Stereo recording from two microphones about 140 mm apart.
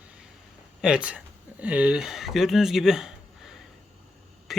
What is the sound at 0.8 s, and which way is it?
Speech, 5° right (ahead or behind).